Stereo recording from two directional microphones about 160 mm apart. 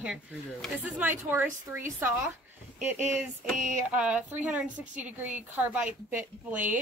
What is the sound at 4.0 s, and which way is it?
A woman's voice, 10° right (ahead or behind).